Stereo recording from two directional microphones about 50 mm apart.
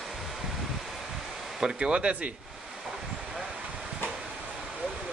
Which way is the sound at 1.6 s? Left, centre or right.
Centre.